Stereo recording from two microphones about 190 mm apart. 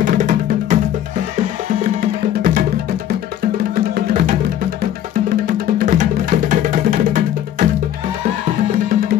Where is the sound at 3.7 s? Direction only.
45° right (ahead or behind).